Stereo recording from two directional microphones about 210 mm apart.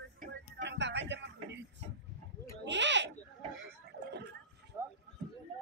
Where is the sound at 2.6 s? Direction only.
60° right (ahead or behind).